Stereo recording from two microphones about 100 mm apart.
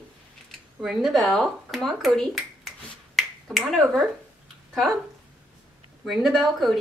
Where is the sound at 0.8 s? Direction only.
5° right (ahead or behind).